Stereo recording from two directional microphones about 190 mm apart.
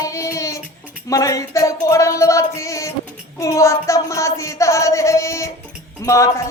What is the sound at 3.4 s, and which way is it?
Speech, 15° left (ahead or behind).